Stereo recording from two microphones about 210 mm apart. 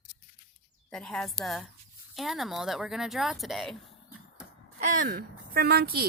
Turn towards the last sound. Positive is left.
turn(degrees=-45)  # may be behind; listen again after turning